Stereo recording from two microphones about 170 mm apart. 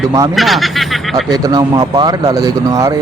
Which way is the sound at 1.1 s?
25° right (ahead or behind).